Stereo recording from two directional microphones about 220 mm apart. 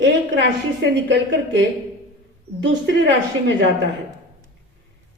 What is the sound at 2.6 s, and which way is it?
Speech, 55° right (ahead or behind).